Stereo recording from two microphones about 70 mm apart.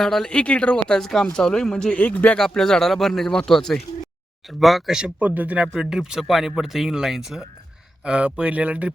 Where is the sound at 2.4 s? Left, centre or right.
Centre.